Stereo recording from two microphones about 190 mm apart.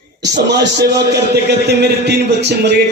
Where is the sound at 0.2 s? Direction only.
65° right (ahead or behind).